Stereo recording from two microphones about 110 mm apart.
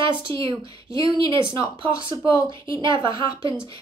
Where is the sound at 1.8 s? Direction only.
50° right (ahead or behind).